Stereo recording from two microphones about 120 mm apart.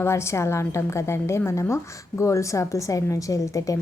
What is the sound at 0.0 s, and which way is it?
A woman's voice, 20° left (ahead or behind).